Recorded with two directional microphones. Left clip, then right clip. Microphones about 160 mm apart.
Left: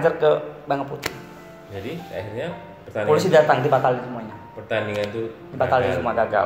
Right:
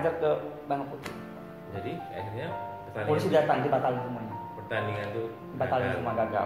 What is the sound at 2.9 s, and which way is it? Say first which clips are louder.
Speech: left 10 dB; 40° left (ahead or behind).